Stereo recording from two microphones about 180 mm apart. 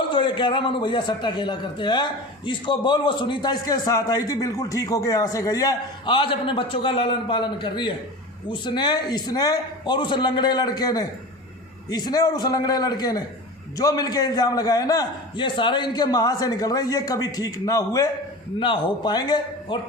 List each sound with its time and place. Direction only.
0.1 s a man's voice: 25° left (ahead or behind)